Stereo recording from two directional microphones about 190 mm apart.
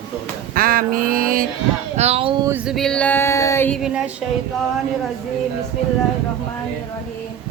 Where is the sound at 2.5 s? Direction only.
Centre (ahead or behind).